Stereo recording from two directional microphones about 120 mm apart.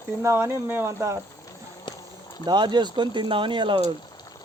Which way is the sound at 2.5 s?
40° right (ahead or behind).